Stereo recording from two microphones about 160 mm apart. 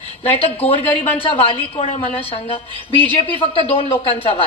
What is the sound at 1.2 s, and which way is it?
A woman's voice, 35° left (ahead or behind).